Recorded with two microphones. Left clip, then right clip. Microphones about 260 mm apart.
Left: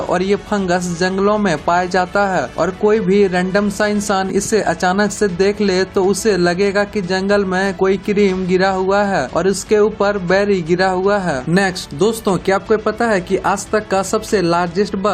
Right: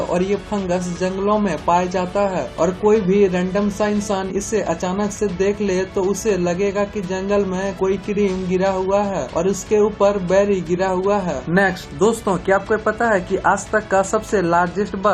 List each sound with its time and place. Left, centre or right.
0.1 s speech: left
12.5 s speech: left